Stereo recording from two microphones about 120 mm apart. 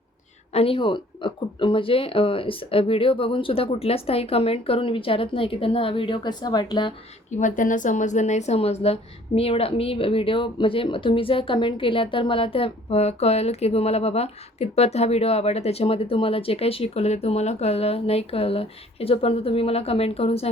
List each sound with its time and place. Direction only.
0.5 s speech: 50° left (ahead or behind)
7.3 s a woman's voice: 90° left; by 20.5 s 55° left (ahead or behind)